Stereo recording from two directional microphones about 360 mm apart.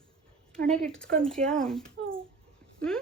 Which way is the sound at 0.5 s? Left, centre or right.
Centre.